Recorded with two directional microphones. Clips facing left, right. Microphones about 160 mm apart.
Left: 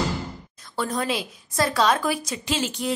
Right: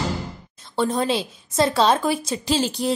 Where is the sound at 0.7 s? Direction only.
25° right (ahead or behind).